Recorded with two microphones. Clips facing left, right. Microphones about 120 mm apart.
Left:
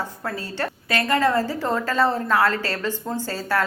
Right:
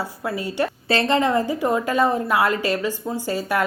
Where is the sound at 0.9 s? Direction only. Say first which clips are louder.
Right 1 dB; 25° right (ahead or behind).